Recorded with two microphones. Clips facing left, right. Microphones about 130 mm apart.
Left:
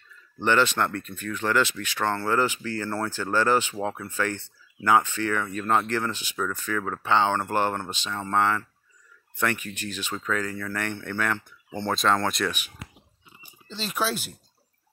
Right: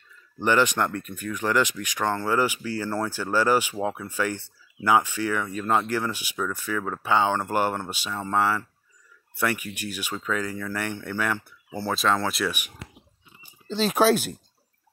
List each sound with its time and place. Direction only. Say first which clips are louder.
0.4 s speech: right 1 dB; 10° right (ahead or behind)
13.7 s speech: right 9 dB; 50° right (ahead or behind)